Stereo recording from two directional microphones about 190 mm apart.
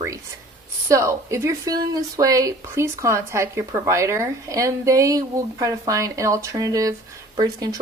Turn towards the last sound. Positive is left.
turn(degrees=-20)  # may be behind; listen again after turning